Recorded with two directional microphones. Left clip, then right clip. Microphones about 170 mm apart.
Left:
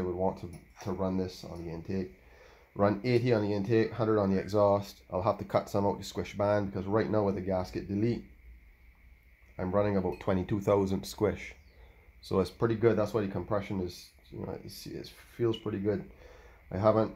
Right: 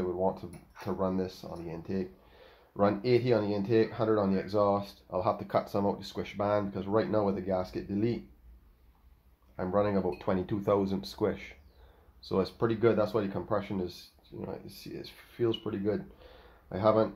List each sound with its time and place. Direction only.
0.0 s a sound: 25° left (ahead or behind)
0.8 s speech: 20° left (ahead or behind)
9.6 s speech: 30° left (ahead or behind)